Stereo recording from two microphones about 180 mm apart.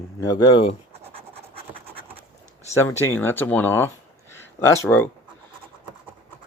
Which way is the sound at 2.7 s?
15° left (ahead or behind).